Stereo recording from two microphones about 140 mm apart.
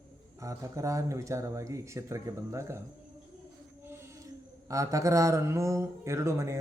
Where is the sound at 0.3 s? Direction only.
25° right (ahead or behind).